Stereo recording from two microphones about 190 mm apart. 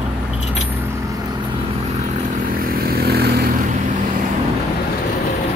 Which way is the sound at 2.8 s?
55° right (ahead or behind).